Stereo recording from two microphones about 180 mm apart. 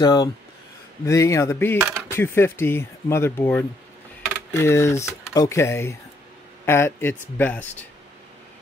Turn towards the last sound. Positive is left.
turn(degrees=10)  # may be behind; listen again after turning